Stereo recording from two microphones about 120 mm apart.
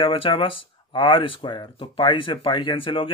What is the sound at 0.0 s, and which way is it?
Speech, 45° left (ahead or behind).